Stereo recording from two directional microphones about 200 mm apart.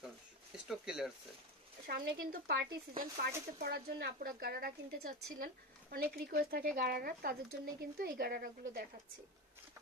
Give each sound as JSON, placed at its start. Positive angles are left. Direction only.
{"t": 0.7, "sound": "speech", "side_deg": 0}
{"t": 1.9, "sound": "speech", "side_deg": -55}